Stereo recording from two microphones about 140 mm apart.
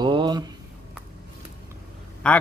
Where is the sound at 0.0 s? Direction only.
35° right (ahead or behind).